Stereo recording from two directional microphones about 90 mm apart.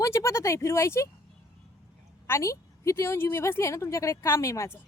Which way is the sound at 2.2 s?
30° left (ahead or behind).